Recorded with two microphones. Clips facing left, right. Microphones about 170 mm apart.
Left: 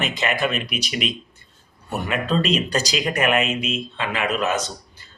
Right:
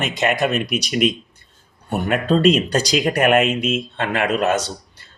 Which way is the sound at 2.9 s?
45° right (ahead or behind).